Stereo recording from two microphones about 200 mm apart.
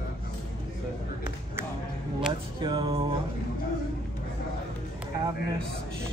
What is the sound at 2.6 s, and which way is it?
Speech, 25° right (ahead or behind).